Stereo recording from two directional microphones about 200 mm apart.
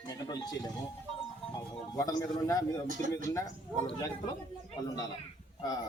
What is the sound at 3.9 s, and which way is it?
Speech, 20° left (ahead or behind).